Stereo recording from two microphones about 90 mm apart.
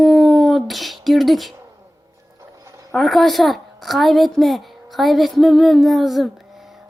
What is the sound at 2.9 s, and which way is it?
A woman's voice, centre (ahead or behind).